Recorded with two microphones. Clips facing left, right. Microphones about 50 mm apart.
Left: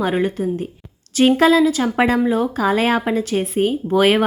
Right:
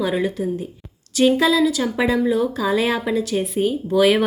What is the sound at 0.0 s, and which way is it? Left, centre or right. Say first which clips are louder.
A woman's voice: left 2 dB; left.